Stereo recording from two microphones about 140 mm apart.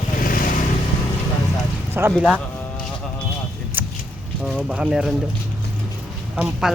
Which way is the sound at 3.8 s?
15° right (ahead or behind).